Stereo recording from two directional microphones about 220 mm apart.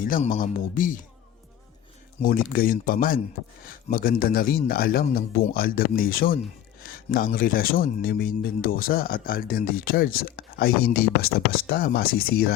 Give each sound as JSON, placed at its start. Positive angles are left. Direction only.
{"t": 0.3, "sound": "speech", "side_deg": 40}
{"t": 2.2, "sound": "speech", "side_deg": 40}